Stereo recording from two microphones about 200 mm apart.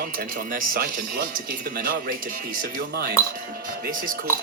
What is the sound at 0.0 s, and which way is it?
Speech, 45° right (ahead or behind).